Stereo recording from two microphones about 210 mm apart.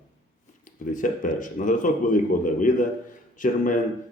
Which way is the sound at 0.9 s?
40° left (ahead or behind).